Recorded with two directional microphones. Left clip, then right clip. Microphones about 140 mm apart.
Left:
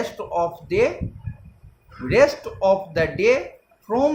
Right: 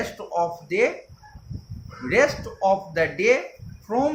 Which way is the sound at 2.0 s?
60° left (ahead or behind).